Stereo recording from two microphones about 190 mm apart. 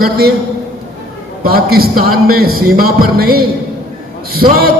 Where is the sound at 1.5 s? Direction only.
50° right (ahead or behind).